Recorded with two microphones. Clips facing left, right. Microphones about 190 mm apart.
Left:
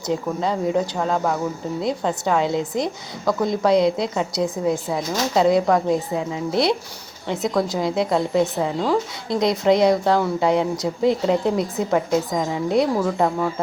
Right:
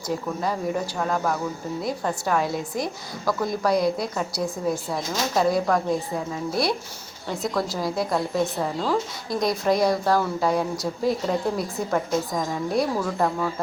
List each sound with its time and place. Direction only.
0.1 s a woman's voice: 20° left (ahead or behind)